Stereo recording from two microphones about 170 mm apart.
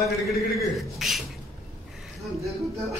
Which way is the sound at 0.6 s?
Centre (ahead or behind).